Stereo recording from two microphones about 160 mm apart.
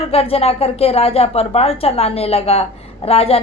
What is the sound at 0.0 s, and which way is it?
A woman's voice, 40° left (ahead or behind).